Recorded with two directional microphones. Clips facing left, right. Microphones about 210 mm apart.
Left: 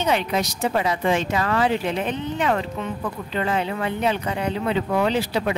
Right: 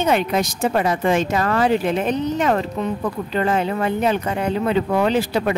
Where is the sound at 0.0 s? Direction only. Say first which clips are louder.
Right 3 dB; 50° right (ahead or behind).